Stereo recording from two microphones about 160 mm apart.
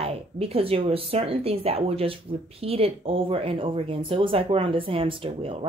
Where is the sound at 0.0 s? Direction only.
35° right (ahead or behind).